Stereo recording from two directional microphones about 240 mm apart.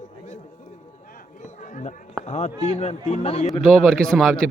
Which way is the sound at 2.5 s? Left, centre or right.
Centre.